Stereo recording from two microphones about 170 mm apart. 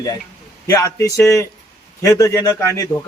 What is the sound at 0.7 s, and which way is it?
A man's voice, 20° left (ahead or behind).